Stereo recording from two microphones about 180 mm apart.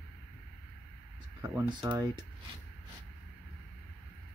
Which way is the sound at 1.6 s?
25° right (ahead or behind).